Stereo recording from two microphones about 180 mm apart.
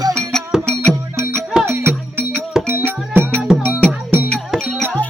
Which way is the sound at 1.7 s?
10° right (ahead or behind).